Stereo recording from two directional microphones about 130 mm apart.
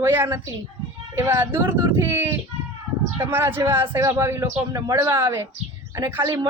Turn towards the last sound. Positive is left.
turn(degrees=-20)  # may be behind; listen again after turning